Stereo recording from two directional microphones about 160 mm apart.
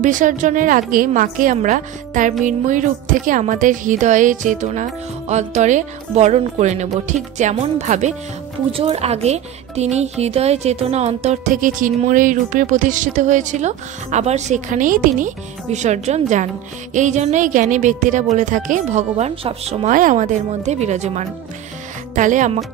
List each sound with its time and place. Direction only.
0.0 s speech: 55° right (ahead or behind)
19.9 s speech: 55° right (ahead or behind)